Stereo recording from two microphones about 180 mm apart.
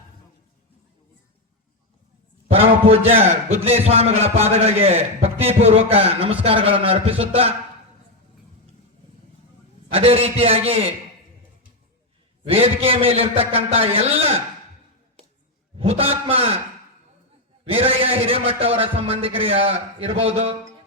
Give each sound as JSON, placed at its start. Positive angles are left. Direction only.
{"t": 2.5, "sound": "a man's voice", "side_deg": -30}
{"t": 9.9, "sound": "a man's voice", "side_deg": -35}
{"t": 12.5, "sound": "a man's voice", "side_deg": -35}
{"t": 15.8, "sound": "a man's voice", "side_deg": -30}
{"t": 17.7, "sound": "a man's voice", "side_deg": -30}